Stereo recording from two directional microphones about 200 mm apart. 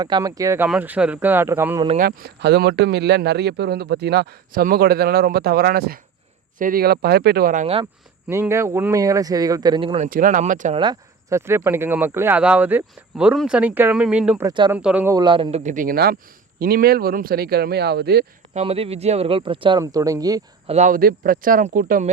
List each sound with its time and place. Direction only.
0.0 s speech: 20° right (ahead or behind)
2.0 s speech: 50° right (ahead or behind)
8.3 s speech: 15° right (ahead or behind)
10.1 s speech: 40° right (ahead or behind)
10.8 s speech: 20° right (ahead or behind)
14.4 s speech: 25° right (ahead or behind)
14.7 s speech: 5° right (ahead or behind)
15.1 s speech: 25° right (ahead or behind); by 18.3 s 50° right (ahead or behind)
18.5 s speech: 30° right (ahead or behind)
20.7 s speech: 35° right (ahead or behind)